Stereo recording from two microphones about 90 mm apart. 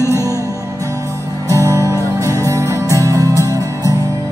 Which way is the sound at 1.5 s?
35° right (ahead or behind).